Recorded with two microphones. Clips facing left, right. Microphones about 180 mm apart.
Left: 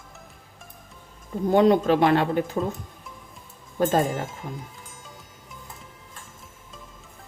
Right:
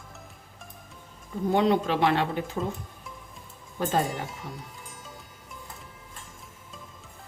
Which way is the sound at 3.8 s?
45° left (ahead or behind).